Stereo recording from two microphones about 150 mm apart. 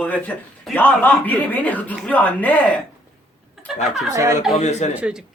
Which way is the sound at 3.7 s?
50° left (ahead or behind).